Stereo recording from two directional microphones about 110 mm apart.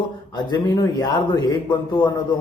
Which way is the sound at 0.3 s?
40° left (ahead or behind).